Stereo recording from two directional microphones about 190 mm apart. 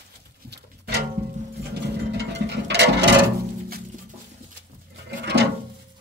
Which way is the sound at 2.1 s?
65° right (ahead or behind).